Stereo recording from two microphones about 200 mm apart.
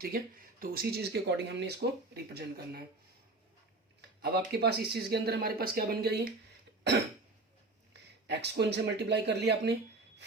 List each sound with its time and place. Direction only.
0.1 s speech: 45° right (ahead or behind)
4.2 s speech: 55° right (ahead or behind)
8.3 s speech: 60° right (ahead or behind)